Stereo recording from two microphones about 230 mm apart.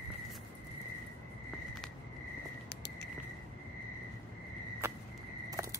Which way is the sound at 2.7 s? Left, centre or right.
Left.